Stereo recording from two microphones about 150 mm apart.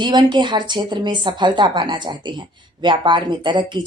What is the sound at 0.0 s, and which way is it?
Speech, 30° right (ahead or behind).